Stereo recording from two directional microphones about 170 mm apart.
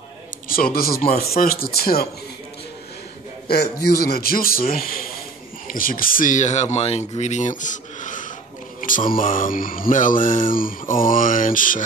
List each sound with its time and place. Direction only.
0.5 s speech: 60° left (ahead or behind)
3.4 s a man's voice: 70° left (ahead or behind)
5.7 s mantra: 55° left (ahead or behind)